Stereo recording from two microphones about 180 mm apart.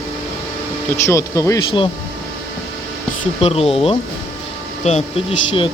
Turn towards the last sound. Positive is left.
turn(degrees=35)  # may be behind; listen again after turning